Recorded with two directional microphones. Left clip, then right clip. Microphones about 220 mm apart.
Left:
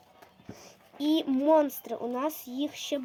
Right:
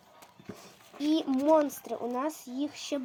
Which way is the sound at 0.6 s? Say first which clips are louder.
Left 1 dB; 15° left (ahead or behind).